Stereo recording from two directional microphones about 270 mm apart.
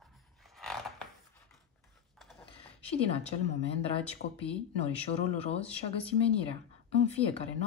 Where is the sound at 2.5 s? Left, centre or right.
Left.